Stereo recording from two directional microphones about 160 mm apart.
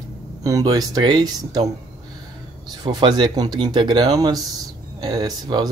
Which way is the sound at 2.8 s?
25° right (ahead or behind).